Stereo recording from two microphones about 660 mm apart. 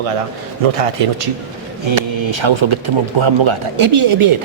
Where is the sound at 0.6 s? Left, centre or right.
Right.